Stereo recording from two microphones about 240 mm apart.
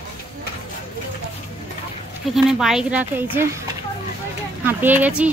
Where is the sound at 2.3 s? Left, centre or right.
Centre.